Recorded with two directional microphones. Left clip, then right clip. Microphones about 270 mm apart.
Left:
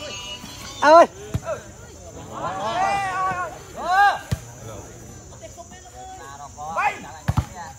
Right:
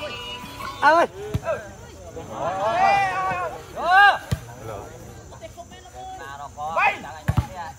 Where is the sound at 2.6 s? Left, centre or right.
Right.